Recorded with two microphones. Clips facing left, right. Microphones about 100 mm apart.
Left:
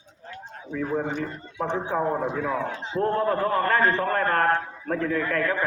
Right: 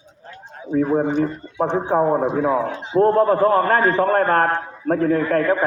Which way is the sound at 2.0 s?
20° right (ahead or behind).